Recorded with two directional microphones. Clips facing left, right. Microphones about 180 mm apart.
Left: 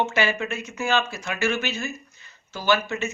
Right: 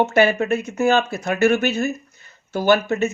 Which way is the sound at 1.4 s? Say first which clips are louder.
Right 8 dB; 60° right (ahead or behind).